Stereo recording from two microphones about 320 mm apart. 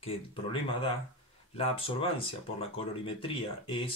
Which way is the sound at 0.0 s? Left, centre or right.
Centre.